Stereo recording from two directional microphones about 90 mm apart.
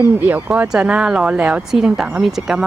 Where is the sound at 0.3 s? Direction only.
20° right (ahead or behind).